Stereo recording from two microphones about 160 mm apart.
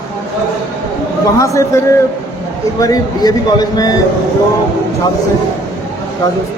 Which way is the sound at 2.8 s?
25° left (ahead or behind).